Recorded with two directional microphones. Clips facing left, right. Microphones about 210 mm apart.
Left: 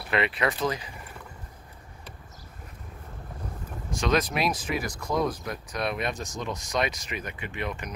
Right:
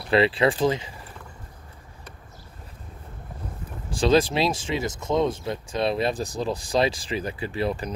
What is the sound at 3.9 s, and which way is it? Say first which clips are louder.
Speech: right 6 dB; 30° right (ahead or behind).